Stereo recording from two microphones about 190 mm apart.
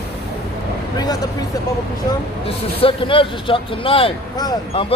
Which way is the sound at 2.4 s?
30° left (ahead or behind).